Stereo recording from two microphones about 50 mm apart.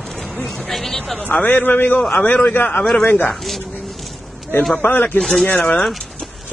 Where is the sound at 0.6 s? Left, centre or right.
Centre.